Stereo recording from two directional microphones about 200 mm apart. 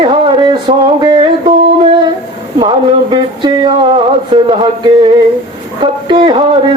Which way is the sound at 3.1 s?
25° right (ahead or behind).